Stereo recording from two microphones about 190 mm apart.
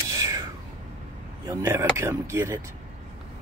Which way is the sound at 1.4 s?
15° right (ahead or behind).